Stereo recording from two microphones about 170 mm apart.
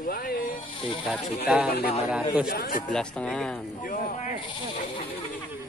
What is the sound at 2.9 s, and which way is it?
Speech, 5° left (ahead or behind).